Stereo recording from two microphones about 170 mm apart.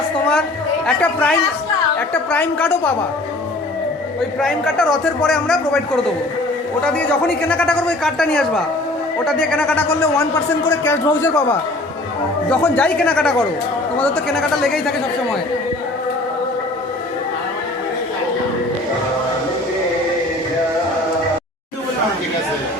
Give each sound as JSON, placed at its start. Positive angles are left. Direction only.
{"t": 0.9, "sound": "a man's voice", "side_deg": 10}
{"t": 4.4, "sound": "a man's voice", "side_deg": 0}
{"t": 6.8, "sound": "a man's voice", "side_deg": 5}
{"t": 10.0, "sound": "a man's voice", "side_deg": 20}
{"t": 12.5, "sound": "a man's voice", "side_deg": 10}